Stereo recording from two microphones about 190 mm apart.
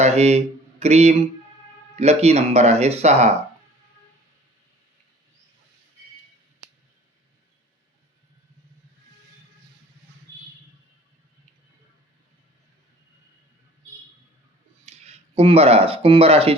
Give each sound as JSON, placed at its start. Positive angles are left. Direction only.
{"t": 0.0, "sound": "speech", "side_deg": -35}
{"t": 14.8, "sound": "speech", "side_deg": -35}